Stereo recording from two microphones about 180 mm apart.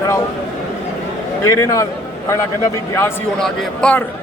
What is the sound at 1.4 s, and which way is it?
Speech, 15° left (ahead or behind).